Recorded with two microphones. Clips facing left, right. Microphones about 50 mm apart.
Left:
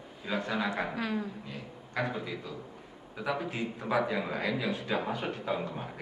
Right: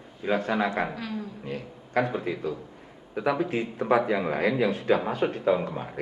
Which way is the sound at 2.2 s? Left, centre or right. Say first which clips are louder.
Right 8 dB; right.